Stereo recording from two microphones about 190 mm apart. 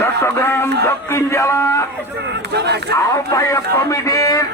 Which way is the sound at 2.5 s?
60° right (ahead or behind).